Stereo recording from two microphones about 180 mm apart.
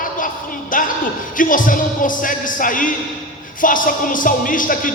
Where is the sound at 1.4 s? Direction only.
50° left (ahead or behind).